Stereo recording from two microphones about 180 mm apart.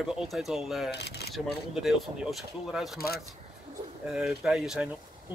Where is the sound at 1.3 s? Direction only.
Centre (ahead or behind).